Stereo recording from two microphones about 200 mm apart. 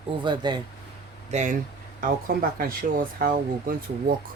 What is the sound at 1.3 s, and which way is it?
Speech, 35° right (ahead or behind).